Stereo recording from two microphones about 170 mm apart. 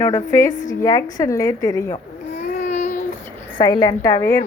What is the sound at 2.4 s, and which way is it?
Child singing, 45° left (ahead or behind).